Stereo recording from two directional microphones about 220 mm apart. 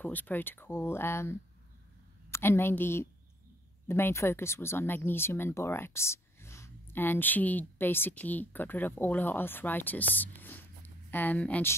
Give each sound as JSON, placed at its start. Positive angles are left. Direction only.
{"t": 0.0, "sound": "speech", "side_deg": 10}
{"t": 2.3, "sound": "speech", "side_deg": 10}